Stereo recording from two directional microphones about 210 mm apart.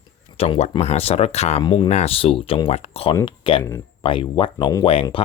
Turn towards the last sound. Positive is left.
turn(degrees=25)  # may be behind; listen again after turning